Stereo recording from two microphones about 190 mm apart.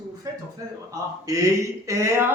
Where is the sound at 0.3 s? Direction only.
20° right (ahead or behind).